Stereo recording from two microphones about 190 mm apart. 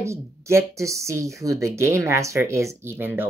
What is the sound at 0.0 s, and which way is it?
Speech, 15° right (ahead or behind).